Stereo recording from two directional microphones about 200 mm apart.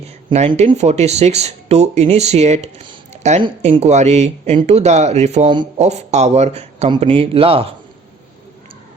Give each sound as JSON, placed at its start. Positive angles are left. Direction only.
{"t": 0.3, "sound": "speech", "side_deg": -35}